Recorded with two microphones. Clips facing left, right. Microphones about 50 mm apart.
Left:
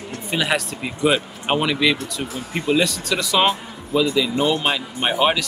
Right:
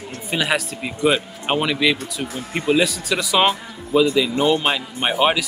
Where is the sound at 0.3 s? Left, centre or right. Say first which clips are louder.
Even; centre.